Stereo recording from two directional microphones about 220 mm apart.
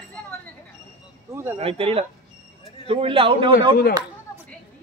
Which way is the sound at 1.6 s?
25° right (ahead or behind).